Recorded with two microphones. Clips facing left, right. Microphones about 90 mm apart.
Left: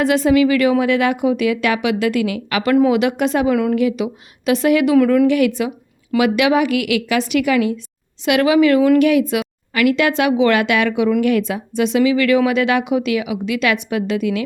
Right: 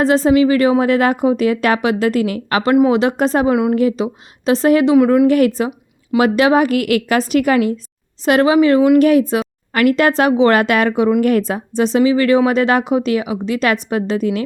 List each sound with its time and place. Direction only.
0.0 s a woman's voice: 35° right (ahead or behind)
4.9 s speech: 20° right (ahead or behind)
5.2 s a woman's voice: 40° right (ahead or behind)
9.0 s a woman's voice: 35° right (ahead or behind)